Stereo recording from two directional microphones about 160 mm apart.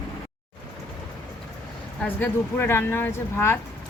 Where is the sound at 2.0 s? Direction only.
10° left (ahead or behind).